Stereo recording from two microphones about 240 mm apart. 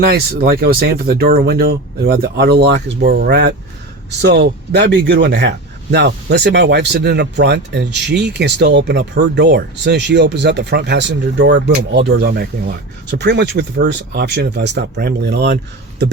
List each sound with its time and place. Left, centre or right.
0.0 s speech: right